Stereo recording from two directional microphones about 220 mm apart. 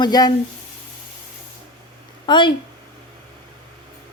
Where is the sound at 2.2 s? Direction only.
20° left (ahead or behind).